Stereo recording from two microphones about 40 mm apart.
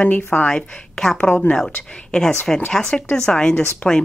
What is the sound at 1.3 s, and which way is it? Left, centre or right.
Speech, left.